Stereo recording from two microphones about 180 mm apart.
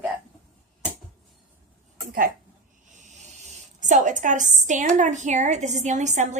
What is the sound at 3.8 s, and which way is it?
A woman's voice, 45° right (ahead or behind).